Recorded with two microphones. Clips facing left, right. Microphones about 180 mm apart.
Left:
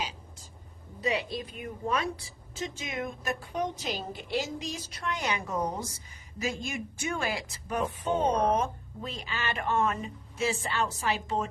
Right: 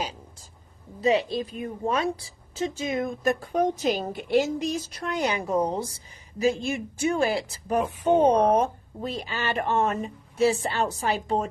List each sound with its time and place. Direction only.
1.0 s a woman's voice: 30° right (ahead or behind); by 4.8 s 55° right (ahead or behind)
5.0 s a woman's voice: 35° right (ahead or behind)